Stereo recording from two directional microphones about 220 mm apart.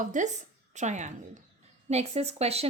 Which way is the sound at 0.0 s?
35° right (ahead or behind).